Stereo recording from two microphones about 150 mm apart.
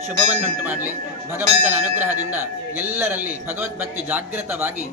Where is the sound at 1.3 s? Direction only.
15° right (ahead or behind).